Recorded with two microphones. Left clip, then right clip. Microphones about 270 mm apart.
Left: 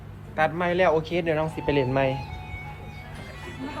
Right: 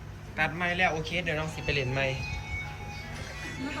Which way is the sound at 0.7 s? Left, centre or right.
Left.